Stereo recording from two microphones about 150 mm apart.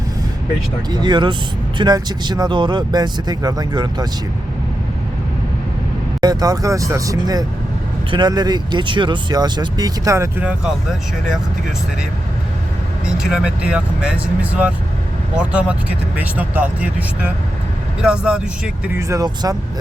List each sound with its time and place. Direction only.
0.9 s speech: 30° right (ahead or behind)
6.2 s speech: 25° right (ahead or behind)
10.4 s speech: 5° right (ahead or behind)
13.1 s speech: 5° right (ahead or behind)
18.9 s speech: 20° right (ahead or behind)